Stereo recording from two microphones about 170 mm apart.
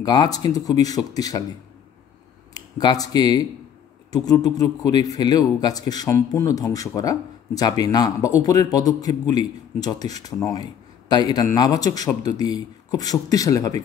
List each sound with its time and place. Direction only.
0.0 s speech: 25° left (ahead or behind)
2.5 s speech: 20° left (ahead or behind)